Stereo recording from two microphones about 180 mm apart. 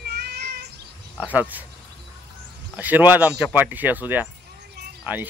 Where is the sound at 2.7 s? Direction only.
10° right (ahead or behind).